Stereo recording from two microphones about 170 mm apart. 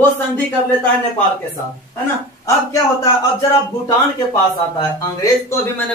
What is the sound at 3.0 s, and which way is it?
Speech, 20° left (ahead or behind).